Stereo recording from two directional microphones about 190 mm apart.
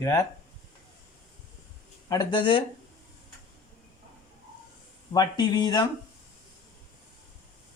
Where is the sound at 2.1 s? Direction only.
20° left (ahead or behind).